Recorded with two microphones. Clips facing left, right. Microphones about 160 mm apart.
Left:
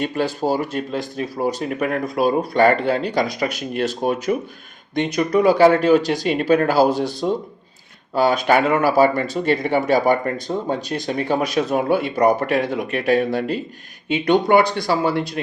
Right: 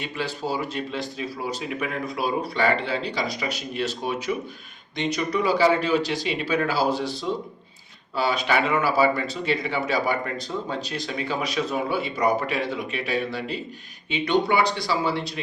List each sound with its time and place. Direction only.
0.0 s speech: 45° left (ahead or behind)